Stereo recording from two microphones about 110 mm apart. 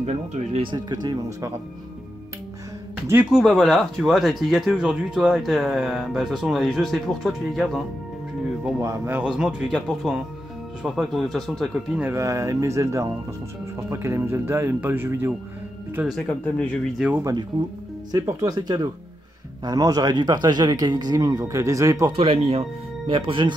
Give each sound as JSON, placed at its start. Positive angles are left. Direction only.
{"t": 0.0, "sound": "speech", "side_deg": -80}
{"t": 0.6, "sound": "speech", "side_deg": -45}
{"t": 3.3, "sound": "speech", "side_deg": -5}
{"t": 8.7, "sound": "speech", "side_deg": -25}
{"t": 9.2, "sound": "speech", "side_deg": -10}
{"t": 12.0, "sound": "speech", "side_deg": -25}
{"t": 16.2, "sound": "speech", "side_deg": 15}
{"t": 17.2, "sound": "speech", "side_deg": -35}
{"t": 22.1, "sound": "speech", "side_deg": -60}